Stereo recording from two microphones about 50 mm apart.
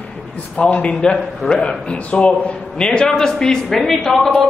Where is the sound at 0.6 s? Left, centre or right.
Centre.